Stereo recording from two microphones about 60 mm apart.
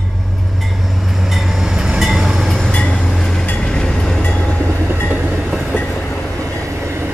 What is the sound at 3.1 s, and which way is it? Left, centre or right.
Vehicle, centre.